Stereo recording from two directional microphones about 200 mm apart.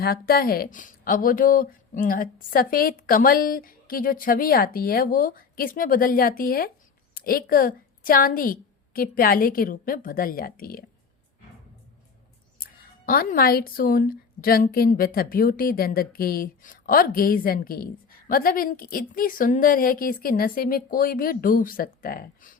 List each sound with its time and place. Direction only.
0.0 s speech: 50° left (ahead or behind)
12.6 s a sound: 45° left (ahead or behind)
13.1 s speech: 45° left (ahead or behind)